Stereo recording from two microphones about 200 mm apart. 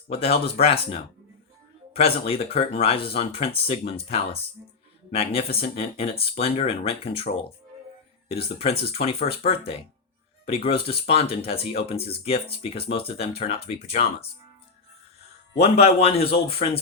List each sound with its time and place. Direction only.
0.1 s speech: 30° left (ahead or behind)
2.0 s speech: 30° left (ahead or behind)
8.4 s a man's voice: 30° left (ahead or behind)
15.5 s a man's voice: 30° left (ahead or behind)